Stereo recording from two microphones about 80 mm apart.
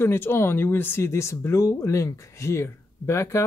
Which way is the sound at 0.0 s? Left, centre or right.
Left.